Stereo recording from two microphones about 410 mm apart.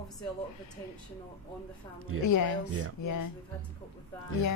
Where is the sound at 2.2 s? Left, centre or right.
Left.